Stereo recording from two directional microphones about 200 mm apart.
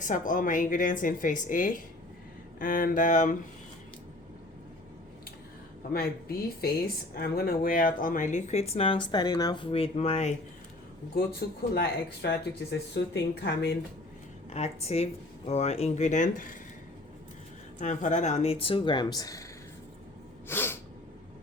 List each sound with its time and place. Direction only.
0.0 s speech: 40° left (ahead or behind)
5.9 s speech: 50° left (ahead or behind); by 10.3 s 30° left (ahead or behind)
11.1 s speech: 50° left (ahead or behind)
14.5 s speech: 30° left (ahead or behind)
17.7 s speech: 40° left (ahead or behind); by 19.5 s 15° left (ahead or behind)
20.5 s sneeze: 10° left (ahead or behind)